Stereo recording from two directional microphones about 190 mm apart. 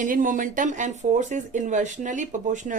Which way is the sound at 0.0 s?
45° right (ahead or behind).